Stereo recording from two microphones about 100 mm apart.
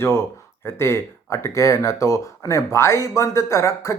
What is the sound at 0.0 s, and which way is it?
Speech, 25° left (ahead or behind).